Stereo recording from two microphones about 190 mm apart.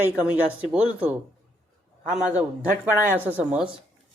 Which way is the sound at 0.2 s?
5° right (ahead or behind).